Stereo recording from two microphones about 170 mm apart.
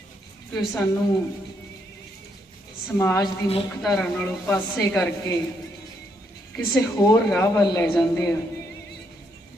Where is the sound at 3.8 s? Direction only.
5° left (ahead or behind).